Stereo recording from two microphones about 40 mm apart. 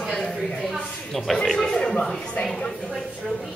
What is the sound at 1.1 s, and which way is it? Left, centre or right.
Speech, centre.